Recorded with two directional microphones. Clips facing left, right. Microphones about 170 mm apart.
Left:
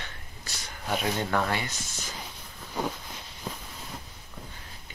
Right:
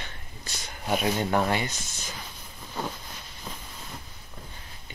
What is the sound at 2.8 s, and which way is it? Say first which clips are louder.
Speech: left 2 dB; 15° left (ahead or behind).